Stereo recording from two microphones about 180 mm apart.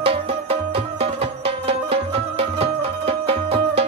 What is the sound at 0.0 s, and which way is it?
Music, 30° right (ahead or behind).